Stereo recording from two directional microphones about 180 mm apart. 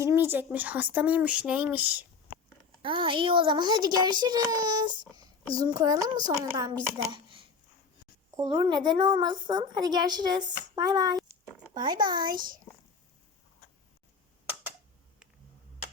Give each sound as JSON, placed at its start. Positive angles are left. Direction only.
{"t": 0.0, "sound": "speech", "side_deg": -15}
{"t": 2.8, "sound": "a child's voice", "side_deg": -30}
{"t": 11.3, "sound": "a sound", "side_deg": -25}